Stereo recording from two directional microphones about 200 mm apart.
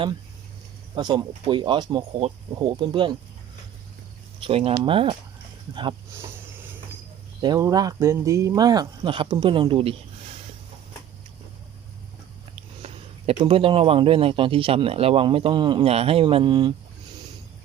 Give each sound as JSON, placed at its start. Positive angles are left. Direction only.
{"t": 0.9, "sound": "speech", "side_deg": -20}
{"t": 4.4, "sound": "speech", "side_deg": -25}
{"t": 7.4, "sound": "speech", "side_deg": -20}
{"t": 12.8, "sound": "speech", "side_deg": -30}